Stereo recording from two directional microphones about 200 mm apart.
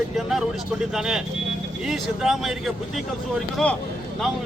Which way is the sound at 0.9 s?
Centre (ahead or behind).